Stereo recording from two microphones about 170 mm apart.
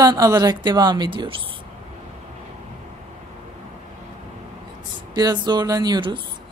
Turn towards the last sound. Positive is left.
turn(degrees=-25)  # may be behind; listen again after turning